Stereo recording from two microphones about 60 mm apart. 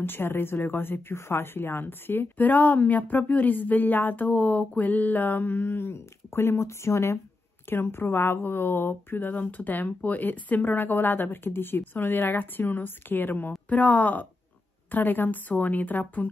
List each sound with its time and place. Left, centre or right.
0.0 s a woman's voice: left